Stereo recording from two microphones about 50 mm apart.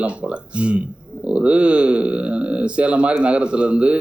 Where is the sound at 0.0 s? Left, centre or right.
Right.